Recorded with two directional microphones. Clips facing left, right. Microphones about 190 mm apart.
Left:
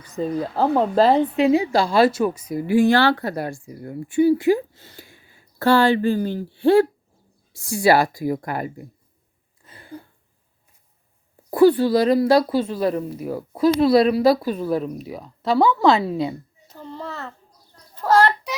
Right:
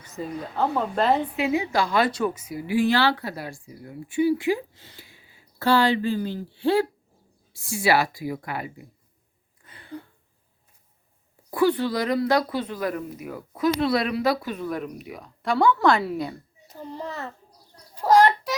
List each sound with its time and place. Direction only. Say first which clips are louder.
0.2 s a woman's voice: left 5 dB; 35° left (ahead or behind)
9.6 s a sound: even; 25° left (ahead or behind)
11.9 s speech: left 7 dB; 30° left (ahead or behind)
16.6 s a child's voice: even; 15° right (ahead or behind)
17.9 s child singing: even; 10° right (ahead or behind)